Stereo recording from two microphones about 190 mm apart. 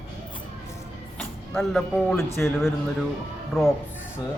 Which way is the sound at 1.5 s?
Centre (ahead or behind).